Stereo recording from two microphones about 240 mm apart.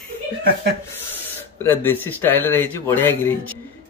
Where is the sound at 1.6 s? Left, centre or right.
Centre.